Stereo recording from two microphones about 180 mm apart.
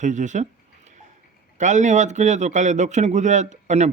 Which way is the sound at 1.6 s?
40° right (ahead or behind).